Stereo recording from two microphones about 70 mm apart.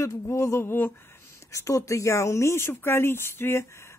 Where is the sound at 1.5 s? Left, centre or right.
Left.